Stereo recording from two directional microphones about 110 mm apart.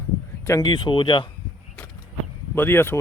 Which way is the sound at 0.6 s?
45° left (ahead or behind).